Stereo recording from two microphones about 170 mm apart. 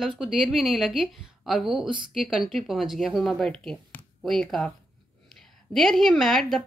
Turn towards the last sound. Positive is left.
turn(degrees=0)  # may be behind; listen again after turning